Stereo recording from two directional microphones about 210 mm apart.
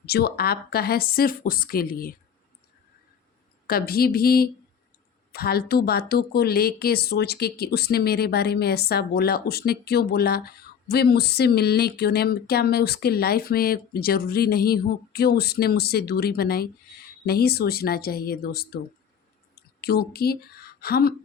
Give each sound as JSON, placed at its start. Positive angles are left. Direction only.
{"t": 0.0, "sound": "a woman's voice", "side_deg": 50}
{"t": 3.7, "sound": "a woman's voice", "side_deg": 45}
{"t": 19.8, "sound": "a woman's voice", "side_deg": 50}